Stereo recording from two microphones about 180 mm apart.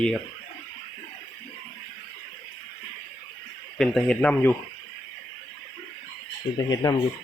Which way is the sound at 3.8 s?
5° left (ahead or behind).